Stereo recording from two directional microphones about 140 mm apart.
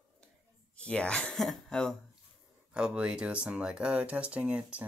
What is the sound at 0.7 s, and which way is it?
Speech, 10° left (ahead or behind).